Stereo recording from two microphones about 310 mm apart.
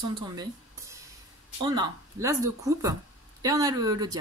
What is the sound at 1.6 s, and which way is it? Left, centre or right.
Speech, centre.